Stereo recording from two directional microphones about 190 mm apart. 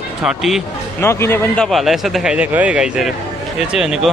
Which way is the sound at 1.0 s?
15° left (ahead or behind).